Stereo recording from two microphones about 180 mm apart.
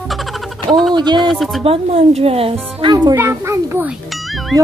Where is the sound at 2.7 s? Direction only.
25° right (ahead or behind).